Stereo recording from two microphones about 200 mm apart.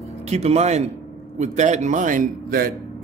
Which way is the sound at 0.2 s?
30° right (ahead or behind).